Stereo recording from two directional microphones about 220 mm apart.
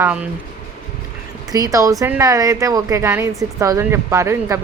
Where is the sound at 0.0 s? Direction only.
5° right (ahead or behind).